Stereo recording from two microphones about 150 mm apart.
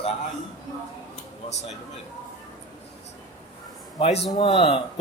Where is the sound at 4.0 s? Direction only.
40° left (ahead or behind).